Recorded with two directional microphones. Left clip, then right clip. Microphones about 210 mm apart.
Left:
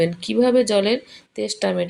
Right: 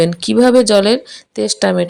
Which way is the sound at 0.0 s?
50° right (ahead or behind).